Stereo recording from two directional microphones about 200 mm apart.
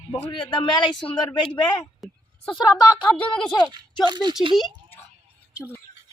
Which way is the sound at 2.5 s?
20° left (ahead or behind).